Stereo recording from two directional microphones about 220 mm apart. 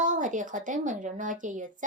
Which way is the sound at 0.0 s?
35° right (ahead or behind).